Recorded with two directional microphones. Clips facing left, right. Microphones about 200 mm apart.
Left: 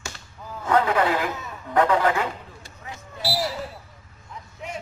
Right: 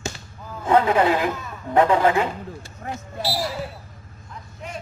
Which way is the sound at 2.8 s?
55° right (ahead or behind).